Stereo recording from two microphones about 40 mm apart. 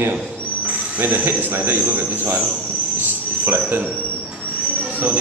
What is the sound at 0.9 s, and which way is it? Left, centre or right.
Speech, right.